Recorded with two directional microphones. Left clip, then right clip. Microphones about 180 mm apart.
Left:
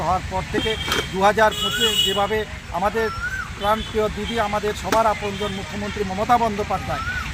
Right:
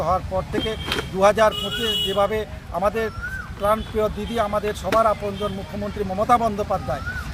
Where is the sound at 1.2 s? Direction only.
25° right (ahead or behind).